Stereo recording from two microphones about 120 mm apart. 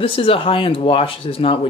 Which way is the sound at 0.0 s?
50° left (ahead or behind).